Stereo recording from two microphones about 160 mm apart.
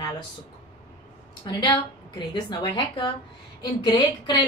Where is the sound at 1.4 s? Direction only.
25° left (ahead or behind).